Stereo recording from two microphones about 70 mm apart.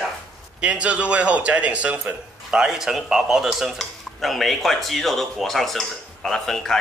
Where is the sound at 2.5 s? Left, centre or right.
Centre.